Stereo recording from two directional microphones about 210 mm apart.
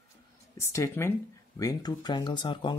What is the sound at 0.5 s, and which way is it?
Speech, 15° left (ahead or behind).